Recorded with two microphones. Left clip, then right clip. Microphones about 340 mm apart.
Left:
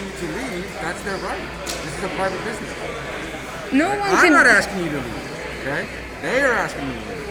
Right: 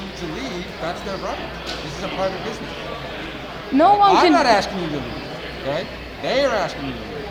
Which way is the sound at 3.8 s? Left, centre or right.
Right.